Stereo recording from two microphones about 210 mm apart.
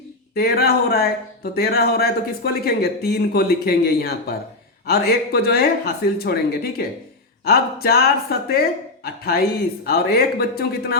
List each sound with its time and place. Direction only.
0.3 s speech: 45° left (ahead or behind)